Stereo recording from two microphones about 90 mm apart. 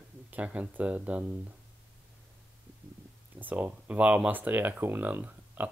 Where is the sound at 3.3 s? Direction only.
20° right (ahead or behind).